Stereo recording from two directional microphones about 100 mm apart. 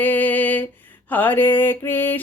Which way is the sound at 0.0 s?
15° left (ahead or behind).